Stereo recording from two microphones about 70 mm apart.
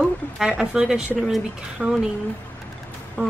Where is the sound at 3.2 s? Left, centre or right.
Right.